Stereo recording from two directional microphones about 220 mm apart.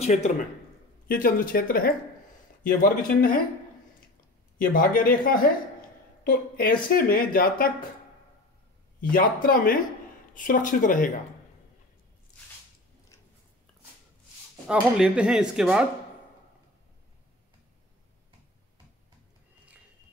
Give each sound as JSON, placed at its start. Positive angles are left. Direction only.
{"t": 0.0, "sound": "a man's voice", "side_deg": 30}
{"t": 1.0, "sound": "speech", "side_deg": 40}
{"t": 4.6, "sound": "speech", "side_deg": 40}
{"t": 9.1, "sound": "speech", "side_deg": 40}
{"t": 14.7, "sound": "speech", "side_deg": -5}